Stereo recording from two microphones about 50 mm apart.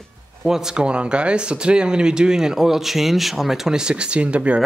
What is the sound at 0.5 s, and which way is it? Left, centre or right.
Speech, centre.